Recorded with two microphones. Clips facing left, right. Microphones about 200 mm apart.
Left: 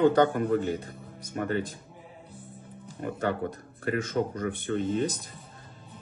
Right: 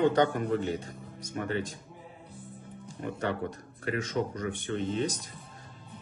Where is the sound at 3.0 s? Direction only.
50° left (ahead or behind).